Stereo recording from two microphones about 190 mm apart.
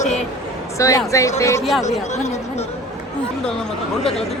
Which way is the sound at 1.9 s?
35° left (ahead or behind).